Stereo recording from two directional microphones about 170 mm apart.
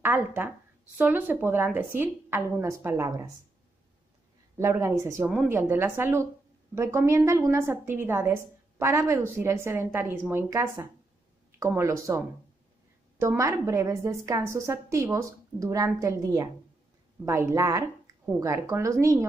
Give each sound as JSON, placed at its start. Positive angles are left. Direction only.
{"t": 0.0, "sound": "a woman's voice", "side_deg": -10}
{"t": 4.6, "sound": "a woman's voice", "side_deg": -15}